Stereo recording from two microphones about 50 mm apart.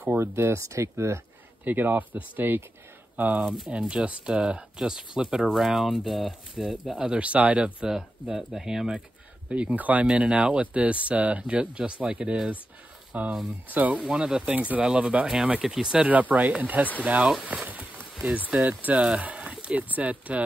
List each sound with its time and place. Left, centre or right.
0.2 s speech: right
1.6 s speech: right
3.4 s speech: centre
8.4 s speech: centre
9.5 s speech: right
13.7 s speech: right
14.1 s speech: centre
16.1 s speech: right
18.6 s speech: right